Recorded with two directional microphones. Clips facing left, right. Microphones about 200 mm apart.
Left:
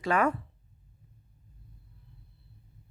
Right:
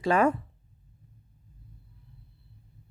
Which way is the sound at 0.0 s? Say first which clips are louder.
Right 3 dB; 30° right (ahead or behind).